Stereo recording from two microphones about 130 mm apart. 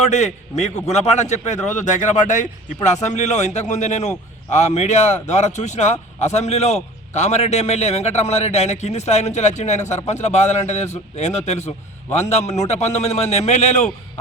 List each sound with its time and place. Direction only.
0.0 s a man's voice: 60° left (ahead or behind)